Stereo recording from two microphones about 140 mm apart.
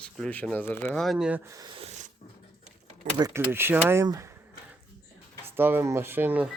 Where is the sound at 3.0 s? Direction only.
60° right (ahead or behind).